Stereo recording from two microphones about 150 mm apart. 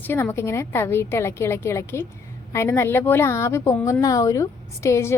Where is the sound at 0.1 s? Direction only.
15° left (ahead or behind).